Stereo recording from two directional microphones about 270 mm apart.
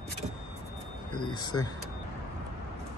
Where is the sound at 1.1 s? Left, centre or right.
Centre.